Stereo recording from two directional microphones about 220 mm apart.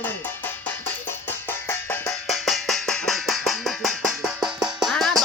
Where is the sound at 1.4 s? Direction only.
10° left (ahead or behind).